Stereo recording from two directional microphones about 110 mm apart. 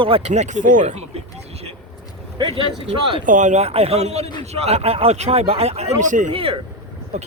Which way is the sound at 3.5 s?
75° right (ahead or behind).